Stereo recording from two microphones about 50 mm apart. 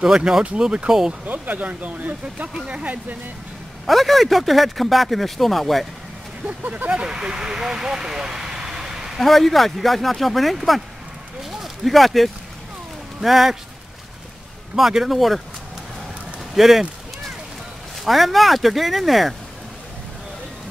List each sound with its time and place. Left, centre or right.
0.0 s speech: centre
1.2 s speech: right
3.8 s speech: centre
6.4 s speech: right
6.9 s speech: centre
9.2 s speech: centre
14.8 s speech: centre
16.5 s speech: centre
18.0 s speech: centre